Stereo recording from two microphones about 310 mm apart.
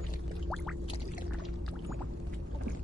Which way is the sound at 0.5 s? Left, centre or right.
Centre.